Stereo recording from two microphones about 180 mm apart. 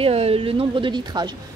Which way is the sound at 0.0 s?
35° right (ahead or behind).